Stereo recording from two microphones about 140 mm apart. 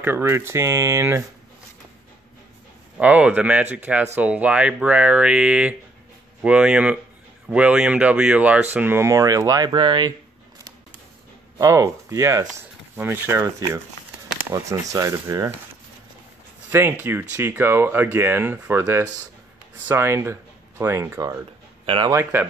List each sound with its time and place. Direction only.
0.0 s speech: 15° right (ahead or behind)
3.0 s speech: 10° right (ahead or behind); by 10.1 s 30° right (ahead or behind)
11.5 s speech: 20° right (ahead or behind)
16.7 s speech: 15° right (ahead or behind)
21.8 s speech: 40° right (ahead or behind)
22.1 s speech: 15° right (ahead or behind)